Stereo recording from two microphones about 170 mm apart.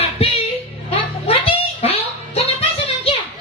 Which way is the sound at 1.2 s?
35° left (ahead or behind).